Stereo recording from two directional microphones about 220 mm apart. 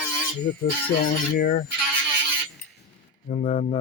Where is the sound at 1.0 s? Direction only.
40° left (ahead or behind).